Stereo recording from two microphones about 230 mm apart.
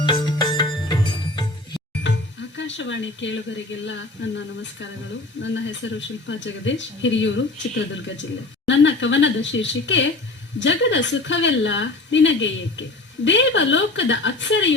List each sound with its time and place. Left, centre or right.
0.0 s music: centre
2.6 s speech: left